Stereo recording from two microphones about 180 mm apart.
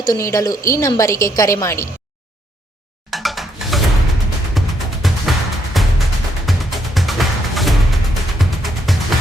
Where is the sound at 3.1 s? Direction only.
Centre (ahead or behind).